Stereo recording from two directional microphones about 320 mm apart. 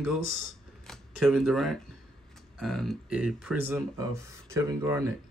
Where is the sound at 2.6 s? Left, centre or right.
Centre.